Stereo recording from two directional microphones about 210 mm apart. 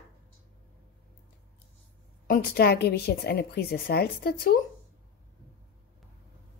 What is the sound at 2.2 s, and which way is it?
A woman's voice, 45° left (ahead or behind).